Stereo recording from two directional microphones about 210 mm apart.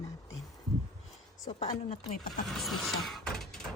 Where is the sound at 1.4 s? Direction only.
25° left (ahead or behind).